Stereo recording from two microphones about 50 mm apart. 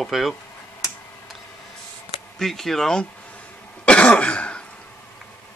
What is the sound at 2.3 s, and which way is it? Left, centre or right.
Speech, centre.